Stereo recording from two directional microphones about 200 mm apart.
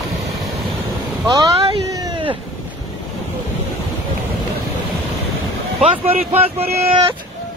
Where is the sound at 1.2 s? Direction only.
25° right (ahead or behind).